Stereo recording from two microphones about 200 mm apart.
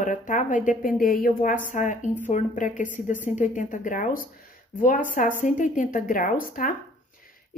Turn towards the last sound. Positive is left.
turn(degrees=45)  # may be behind; listen again after turning